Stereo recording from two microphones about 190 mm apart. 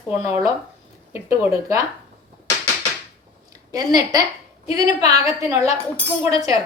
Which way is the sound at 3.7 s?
20° right (ahead or behind).